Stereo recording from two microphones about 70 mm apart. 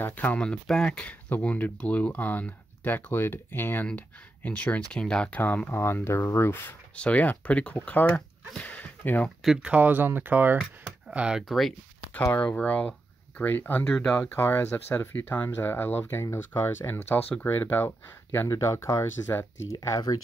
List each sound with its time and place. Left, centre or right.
0.0 s speech: left
0.4 s speech: centre
5.3 s speech: left
5.8 s speech: left
7.0 s speech: left
9.6 s speech: right
11.1 s speech: centre
11.4 s speech: centre
12.4 s speech: left
18.5 s speech: left